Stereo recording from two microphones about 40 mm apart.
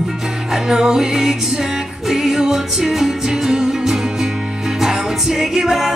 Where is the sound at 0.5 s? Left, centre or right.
Centre.